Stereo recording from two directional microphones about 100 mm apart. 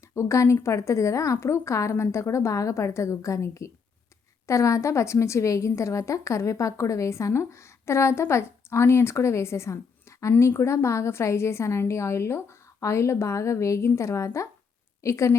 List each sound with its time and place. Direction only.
0.1 s a woman's voice: 30° left (ahead or behind)